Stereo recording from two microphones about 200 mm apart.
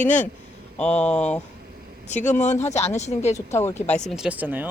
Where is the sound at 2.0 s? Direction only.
35° left (ahead or behind).